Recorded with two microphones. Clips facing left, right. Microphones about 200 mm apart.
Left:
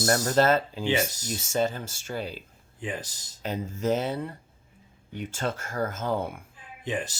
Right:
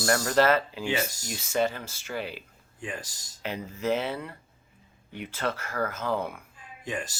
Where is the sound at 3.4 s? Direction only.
45° left (ahead or behind).